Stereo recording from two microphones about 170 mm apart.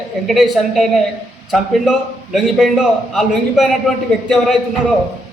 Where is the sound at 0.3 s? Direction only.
Centre (ahead or behind).